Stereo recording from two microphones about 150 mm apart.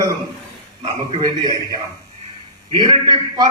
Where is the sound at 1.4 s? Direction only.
25° right (ahead or behind).